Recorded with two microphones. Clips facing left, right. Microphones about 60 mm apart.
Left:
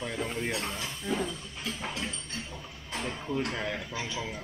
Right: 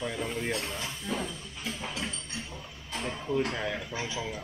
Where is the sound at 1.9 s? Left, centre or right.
Centre.